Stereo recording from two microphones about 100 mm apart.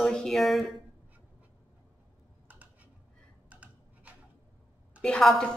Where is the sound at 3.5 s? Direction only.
15° right (ahead or behind).